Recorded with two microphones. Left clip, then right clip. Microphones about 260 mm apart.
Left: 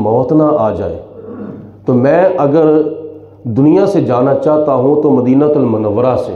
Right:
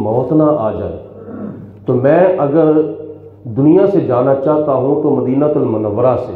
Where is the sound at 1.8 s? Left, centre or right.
Left.